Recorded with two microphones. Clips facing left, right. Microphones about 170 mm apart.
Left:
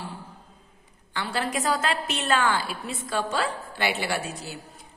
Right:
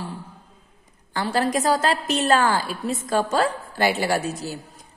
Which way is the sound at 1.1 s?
40° right (ahead or behind).